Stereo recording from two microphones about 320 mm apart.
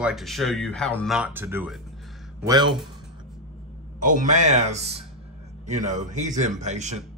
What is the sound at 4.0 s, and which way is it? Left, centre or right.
A man's voice, right.